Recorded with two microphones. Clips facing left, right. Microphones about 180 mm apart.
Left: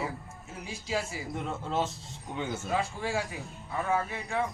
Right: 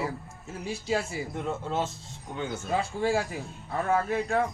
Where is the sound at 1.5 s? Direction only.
Centre (ahead or behind).